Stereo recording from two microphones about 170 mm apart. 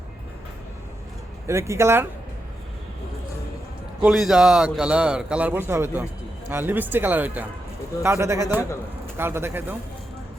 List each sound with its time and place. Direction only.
1.5 s speech: 15° right (ahead or behind)
4.0 s speech: centre (ahead or behind)